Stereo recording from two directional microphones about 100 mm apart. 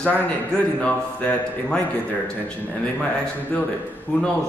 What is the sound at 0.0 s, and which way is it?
A man's voice, 10° left (ahead or behind).